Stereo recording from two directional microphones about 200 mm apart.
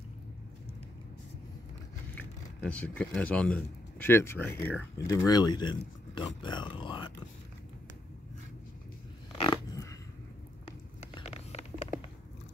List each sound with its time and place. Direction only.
2.1 s vehicle: 5° left (ahead or behind)
3.2 s speech: 5° left (ahead or behind); by 7.2 s 25° left (ahead or behind)
9.4 s dog: 20° left (ahead or behind)
11.1 s a sound: 30° left (ahead or behind)